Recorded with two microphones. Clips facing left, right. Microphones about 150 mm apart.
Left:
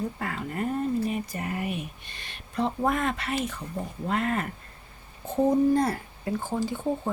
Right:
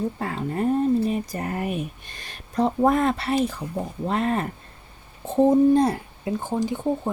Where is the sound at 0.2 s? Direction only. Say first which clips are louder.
Right 5 dB; 30° right (ahead or behind).